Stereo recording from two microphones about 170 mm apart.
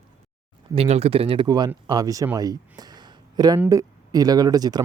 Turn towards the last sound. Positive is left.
turn(degrees=-20)  # may be behind; listen again after turning